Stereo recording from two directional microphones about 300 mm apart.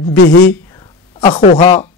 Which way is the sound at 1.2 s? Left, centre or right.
Centre.